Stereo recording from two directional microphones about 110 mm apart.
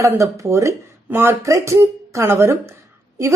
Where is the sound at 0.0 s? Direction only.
30° right (ahead or behind).